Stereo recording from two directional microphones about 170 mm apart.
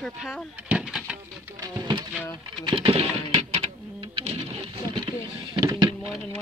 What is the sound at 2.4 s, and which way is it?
Pigeon, 30° right (ahead or behind).